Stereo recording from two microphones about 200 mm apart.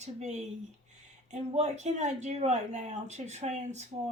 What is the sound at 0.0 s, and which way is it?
Speech, 35° right (ahead or behind).